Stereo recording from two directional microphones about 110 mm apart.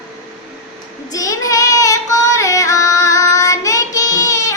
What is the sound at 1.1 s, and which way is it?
Child singing, 30° left (ahead or behind).